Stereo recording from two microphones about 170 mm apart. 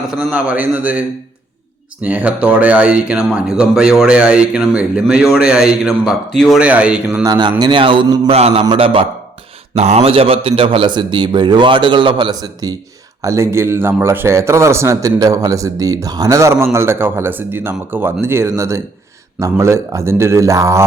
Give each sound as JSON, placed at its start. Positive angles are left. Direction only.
{"t": 0.1, "sound": "a man's voice", "side_deg": -5}
{"t": 7.2, "sound": "a man's voice", "side_deg": -25}
{"t": 8.4, "sound": "a man's voice", "side_deg": -35}